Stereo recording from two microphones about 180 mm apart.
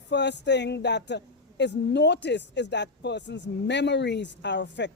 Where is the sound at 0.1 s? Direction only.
75° left (ahead or behind).